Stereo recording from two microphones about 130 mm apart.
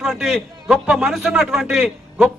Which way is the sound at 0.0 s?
5° right (ahead or behind).